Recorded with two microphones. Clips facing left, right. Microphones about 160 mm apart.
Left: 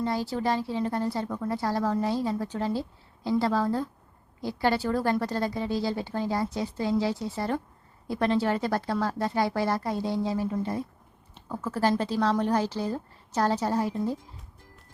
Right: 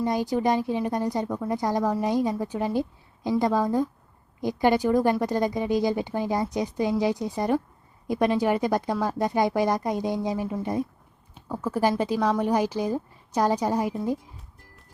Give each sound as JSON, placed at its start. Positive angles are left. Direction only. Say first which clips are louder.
{"t": 0.0, "sound": "speech", "louder": "right 4 dB", "side_deg": -15}